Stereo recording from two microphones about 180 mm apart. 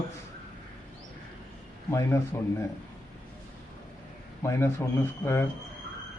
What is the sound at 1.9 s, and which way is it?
Speech, 15° left (ahead or behind).